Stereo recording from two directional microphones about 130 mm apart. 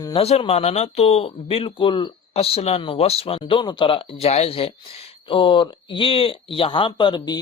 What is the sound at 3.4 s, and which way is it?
Speech, 40° left (ahead or behind).